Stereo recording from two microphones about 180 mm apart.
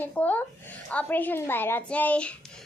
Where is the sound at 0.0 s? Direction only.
10° left (ahead or behind).